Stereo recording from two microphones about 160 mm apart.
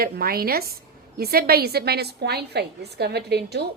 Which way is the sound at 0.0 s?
70° right (ahead or behind).